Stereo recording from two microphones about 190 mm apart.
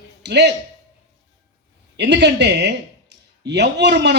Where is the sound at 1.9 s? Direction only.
65° right (ahead or behind).